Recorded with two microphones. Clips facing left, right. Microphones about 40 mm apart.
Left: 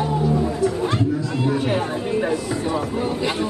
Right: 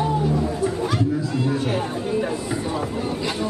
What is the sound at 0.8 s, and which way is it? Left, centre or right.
Chatter, left.